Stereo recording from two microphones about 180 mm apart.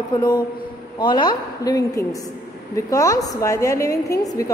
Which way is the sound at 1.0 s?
25° left (ahead or behind).